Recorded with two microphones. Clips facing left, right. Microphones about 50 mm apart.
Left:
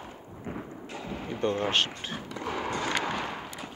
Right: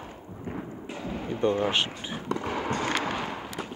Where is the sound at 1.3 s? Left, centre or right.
Right.